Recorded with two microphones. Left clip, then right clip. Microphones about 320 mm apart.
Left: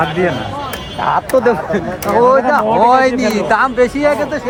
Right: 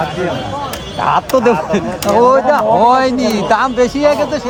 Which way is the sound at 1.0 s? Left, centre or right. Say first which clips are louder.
Right 1 dB; right.